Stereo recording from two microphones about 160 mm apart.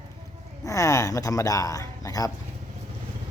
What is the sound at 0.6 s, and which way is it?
Speech, 20° left (ahead or behind).